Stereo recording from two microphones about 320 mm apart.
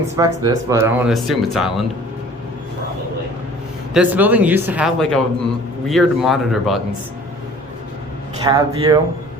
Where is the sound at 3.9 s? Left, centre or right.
Centre.